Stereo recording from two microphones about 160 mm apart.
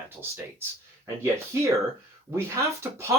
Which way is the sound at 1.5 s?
20° right (ahead or behind).